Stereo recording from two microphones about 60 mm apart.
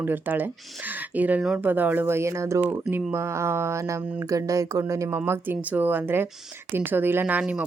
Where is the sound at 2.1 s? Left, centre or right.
Right.